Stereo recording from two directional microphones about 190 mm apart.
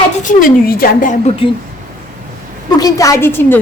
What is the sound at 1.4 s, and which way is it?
Speech, 30° left (ahead or behind).